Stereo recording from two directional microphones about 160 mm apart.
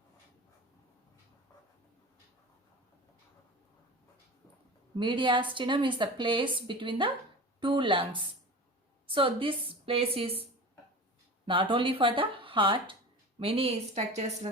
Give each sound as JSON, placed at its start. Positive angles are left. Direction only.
{"t": 4.9, "sound": "a woman's voice", "side_deg": -30}
{"t": 11.4, "sound": "a woman's voice", "side_deg": -30}